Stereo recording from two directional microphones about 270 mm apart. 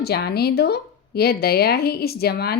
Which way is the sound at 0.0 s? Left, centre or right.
Left.